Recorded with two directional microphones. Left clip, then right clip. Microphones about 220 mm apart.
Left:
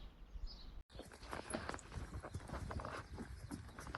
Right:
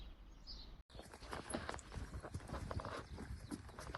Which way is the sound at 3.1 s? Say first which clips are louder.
Even; 5° left (ahead or behind).